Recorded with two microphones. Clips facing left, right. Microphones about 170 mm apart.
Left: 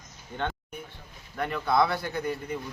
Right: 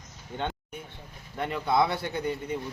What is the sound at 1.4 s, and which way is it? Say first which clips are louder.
Speech: even; 20° right (ahead or behind).